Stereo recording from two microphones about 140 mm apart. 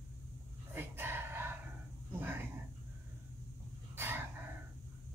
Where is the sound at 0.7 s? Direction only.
15° right (ahead or behind).